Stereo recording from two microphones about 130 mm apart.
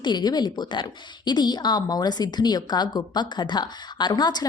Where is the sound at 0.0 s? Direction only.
35° left (ahead or behind).